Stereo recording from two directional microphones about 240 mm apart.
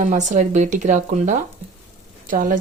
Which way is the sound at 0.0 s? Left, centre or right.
Right.